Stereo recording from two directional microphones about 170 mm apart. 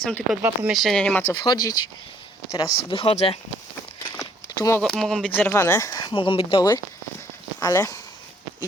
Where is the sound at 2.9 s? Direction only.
35° left (ahead or behind).